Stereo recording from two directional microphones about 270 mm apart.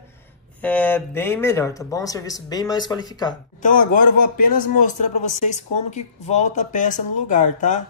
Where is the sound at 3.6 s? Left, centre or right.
Left.